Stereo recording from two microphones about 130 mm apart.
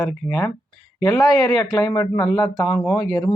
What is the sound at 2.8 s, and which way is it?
Speech, 5° left (ahead or behind).